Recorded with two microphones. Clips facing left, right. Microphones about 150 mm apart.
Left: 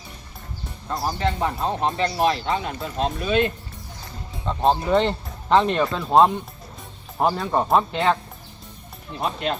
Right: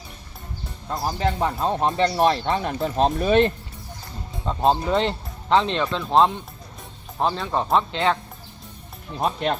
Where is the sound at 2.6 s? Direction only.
40° right (ahead or behind).